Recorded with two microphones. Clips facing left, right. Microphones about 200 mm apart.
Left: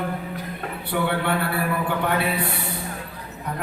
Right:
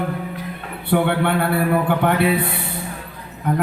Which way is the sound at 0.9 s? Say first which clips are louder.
Right 7 dB; 55° right (ahead or behind).